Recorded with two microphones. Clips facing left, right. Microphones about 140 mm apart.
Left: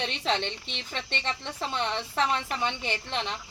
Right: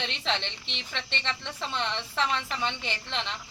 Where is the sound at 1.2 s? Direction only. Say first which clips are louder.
Left 2 dB; 10° left (ahead or behind).